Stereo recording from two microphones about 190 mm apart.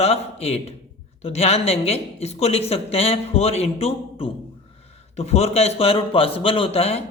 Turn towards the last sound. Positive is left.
turn(degrees=30)  # may be behind; listen again after turning